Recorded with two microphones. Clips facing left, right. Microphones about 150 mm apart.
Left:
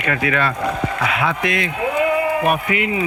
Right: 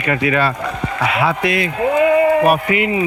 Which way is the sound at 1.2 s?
5° right (ahead or behind).